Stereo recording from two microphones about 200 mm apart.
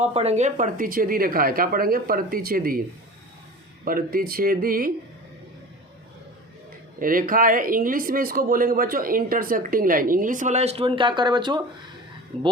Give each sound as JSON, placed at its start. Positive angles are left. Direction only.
{"t": 0.0, "sound": "speech", "side_deg": -30}
{"t": 3.8, "sound": "speech", "side_deg": -45}
{"t": 7.0, "sound": "speech", "side_deg": -45}